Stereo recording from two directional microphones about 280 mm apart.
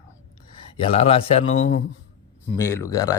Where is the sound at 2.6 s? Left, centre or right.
Centre.